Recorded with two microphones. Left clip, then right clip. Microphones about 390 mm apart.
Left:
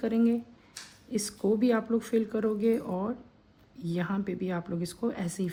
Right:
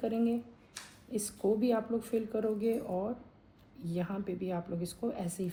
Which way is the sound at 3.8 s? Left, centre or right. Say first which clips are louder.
Left 4 dB; centre.